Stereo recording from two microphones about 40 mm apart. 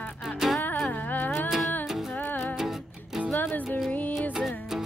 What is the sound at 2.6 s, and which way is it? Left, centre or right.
Music, centre.